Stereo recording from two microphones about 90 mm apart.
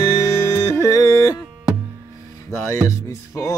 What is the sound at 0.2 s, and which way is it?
Music, 30° left (ahead or behind).